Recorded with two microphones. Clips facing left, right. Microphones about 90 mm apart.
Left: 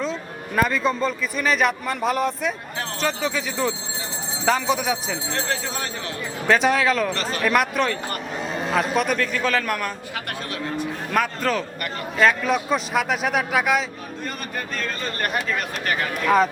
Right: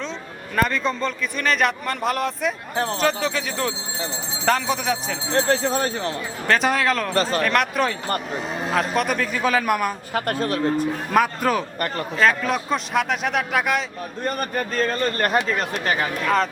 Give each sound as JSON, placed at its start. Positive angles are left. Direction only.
{"t": 0.0, "sound": "a man's voice", "side_deg": 5}
{"t": 5.3, "sound": "a man's voice", "side_deg": -35}
{"t": 6.5, "sound": "a man's voice", "side_deg": 0}
{"t": 7.1, "sound": "a man's voice", "side_deg": -35}
{"t": 7.4, "sound": "a man's voice", "side_deg": 5}
{"t": 10.2, "sound": "a man's voice", "side_deg": -40}
{"t": 11.1, "sound": "a man's voice", "side_deg": -5}
{"t": 14.3, "sound": "a man's voice", "side_deg": -45}